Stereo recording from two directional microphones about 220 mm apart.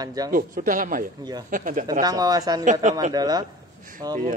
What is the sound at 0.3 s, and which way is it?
Speech, 40° right (ahead or behind).